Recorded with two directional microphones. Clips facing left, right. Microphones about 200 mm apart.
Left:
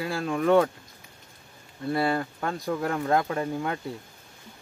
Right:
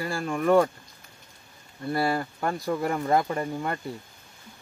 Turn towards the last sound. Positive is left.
turn(degrees=0)  # may be behind; listen again after turning